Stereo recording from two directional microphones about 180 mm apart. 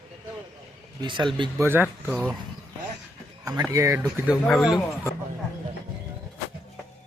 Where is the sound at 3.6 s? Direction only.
15° right (ahead or behind).